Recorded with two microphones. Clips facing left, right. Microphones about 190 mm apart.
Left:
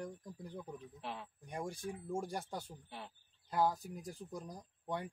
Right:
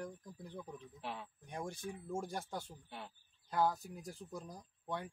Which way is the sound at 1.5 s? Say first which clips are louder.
Left 2 dB; 10° left (ahead or behind).